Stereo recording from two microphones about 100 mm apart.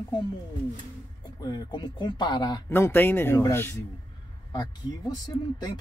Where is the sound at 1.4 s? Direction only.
45° left (ahead or behind).